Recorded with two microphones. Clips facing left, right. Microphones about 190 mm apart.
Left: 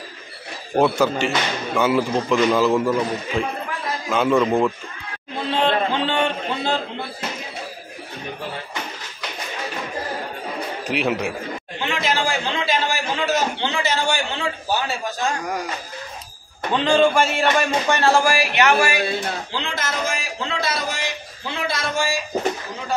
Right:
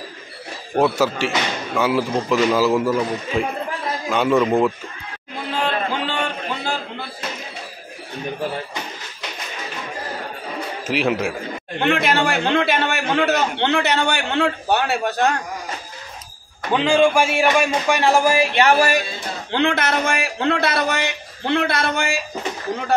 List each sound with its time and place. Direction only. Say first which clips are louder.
0.7 s a man's voice: even; centre (ahead or behind)
5.6 s a sound: left 3 dB; 20° left (ahead or behind)
10.9 s a man's voice: right 2 dB; centre (ahead or behind)
11.8 s a man's voice: right 5 dB; 60° right (ahead or behind)
16.7 s speech: right 1 dB; 10° right (ahead or behind); by 18.9 s 35° right (ahead or behind)
19.5 s a man's voice: right 8 dB; 60° right (ahead or behind)